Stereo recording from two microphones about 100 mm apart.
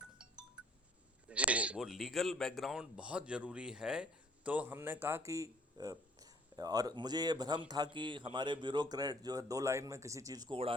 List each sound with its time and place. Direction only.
1.3 s a man's voice: 15° right (ahead or behind); by 10.5 s 40° right (ahead or behind)
10.5 s speech: 60° right (ahead or behind)